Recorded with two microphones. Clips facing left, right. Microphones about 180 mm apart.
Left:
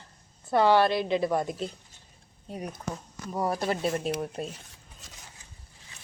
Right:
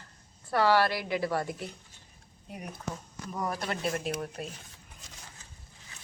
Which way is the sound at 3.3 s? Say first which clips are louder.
Left 5 dB; 30° left (ahead or behind).